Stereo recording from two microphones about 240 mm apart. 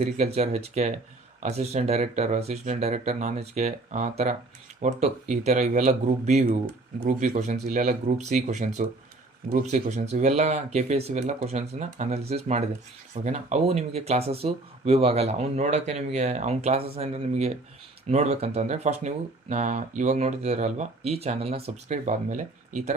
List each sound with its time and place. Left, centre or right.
0.0 s speech: right